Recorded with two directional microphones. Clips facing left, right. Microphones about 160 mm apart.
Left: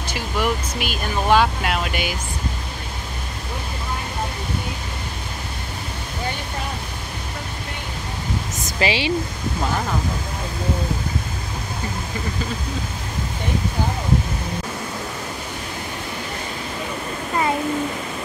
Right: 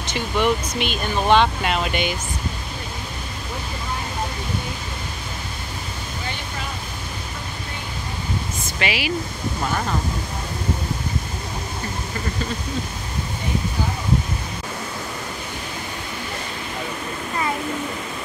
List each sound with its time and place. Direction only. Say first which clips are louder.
0.1 s speech: right 3 dB; 5° left (ahead or behind)
8.6 s speech: left 5 dB; 30° left (ahead or behind)